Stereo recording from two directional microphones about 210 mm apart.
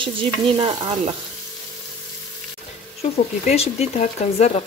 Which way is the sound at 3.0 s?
30° left (ahead or behind).